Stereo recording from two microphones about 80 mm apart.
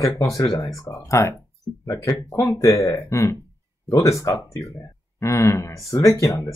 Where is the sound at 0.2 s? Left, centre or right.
Left.